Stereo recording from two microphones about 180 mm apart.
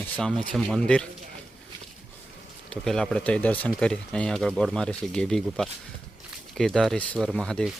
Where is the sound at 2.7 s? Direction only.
5° left (ahead or behind).